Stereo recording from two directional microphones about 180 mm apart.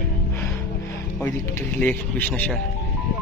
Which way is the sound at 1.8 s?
10° left (ahead or behind).